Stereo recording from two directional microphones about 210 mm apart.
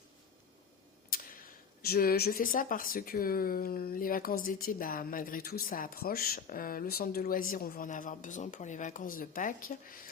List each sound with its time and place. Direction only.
1.1 s speech: 45° left (ahead or behind)